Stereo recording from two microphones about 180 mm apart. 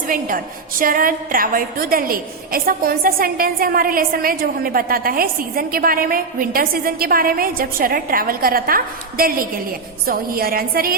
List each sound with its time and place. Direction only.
0.1 s a woman's voice: 50° right (ahead or behind)